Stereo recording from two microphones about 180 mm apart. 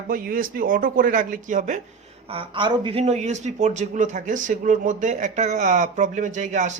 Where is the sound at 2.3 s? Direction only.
30° right (ahead or behind).